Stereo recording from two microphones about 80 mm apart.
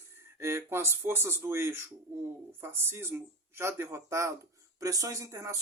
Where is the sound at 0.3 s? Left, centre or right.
Right.